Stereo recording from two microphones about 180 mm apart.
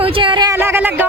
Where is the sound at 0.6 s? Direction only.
10° right (ahead or behind).